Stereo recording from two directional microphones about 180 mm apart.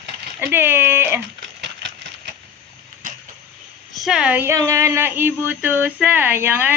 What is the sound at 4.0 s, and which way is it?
Speech, 5° right (ahead or behind).